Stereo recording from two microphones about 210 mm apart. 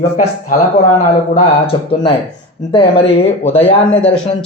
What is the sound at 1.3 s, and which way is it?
A man's voice, 25° left (ahead or behind).